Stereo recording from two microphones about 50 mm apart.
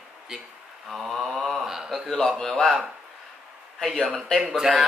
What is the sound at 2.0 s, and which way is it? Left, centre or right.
Speech, centre.